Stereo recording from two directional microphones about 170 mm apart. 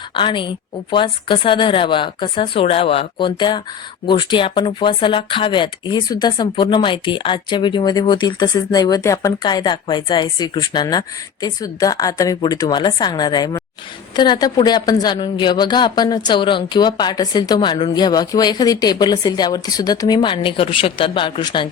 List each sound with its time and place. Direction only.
0.2 s speech: 30° left (ahead or behind)